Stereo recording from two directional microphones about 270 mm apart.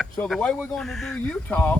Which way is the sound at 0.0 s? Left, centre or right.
Centre.